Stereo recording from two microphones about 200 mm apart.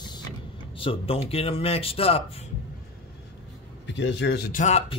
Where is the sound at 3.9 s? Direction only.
60° left (ahead or behind).